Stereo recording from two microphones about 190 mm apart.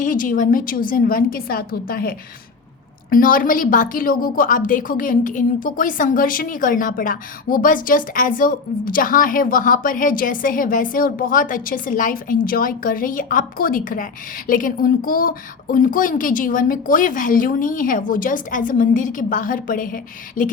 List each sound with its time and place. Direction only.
0.0 s a woman's voice: 45° left (ahead or behind)